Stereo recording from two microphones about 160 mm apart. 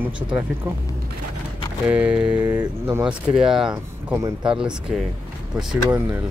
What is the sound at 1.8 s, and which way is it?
Speech, 10° right (ahead or behind).